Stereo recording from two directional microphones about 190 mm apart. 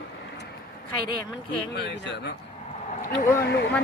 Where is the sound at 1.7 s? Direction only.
65° left (ahead or behind).